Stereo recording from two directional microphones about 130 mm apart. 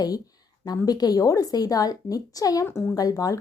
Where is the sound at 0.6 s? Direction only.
30° left (ahead or behind).